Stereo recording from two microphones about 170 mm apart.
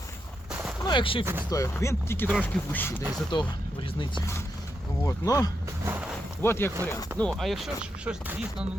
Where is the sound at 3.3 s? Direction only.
30° left (ahead or behind).